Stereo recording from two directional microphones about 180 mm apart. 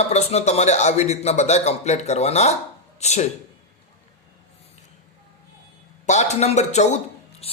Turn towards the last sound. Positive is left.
turn(degrees=35)  # may be behind; listen again after turning